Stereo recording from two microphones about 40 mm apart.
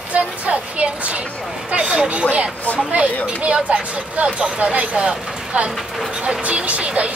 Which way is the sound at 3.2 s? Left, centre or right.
Right.